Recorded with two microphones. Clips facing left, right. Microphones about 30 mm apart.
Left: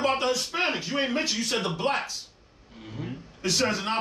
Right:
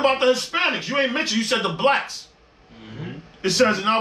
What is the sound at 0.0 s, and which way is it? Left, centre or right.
A man's voice, right.